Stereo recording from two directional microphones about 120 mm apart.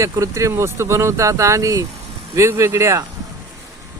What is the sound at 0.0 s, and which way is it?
Speech, 25° right (ahead or behind).